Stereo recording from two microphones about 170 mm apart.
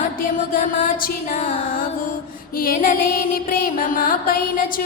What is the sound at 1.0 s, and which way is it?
Music, 60° left (ahead or behind).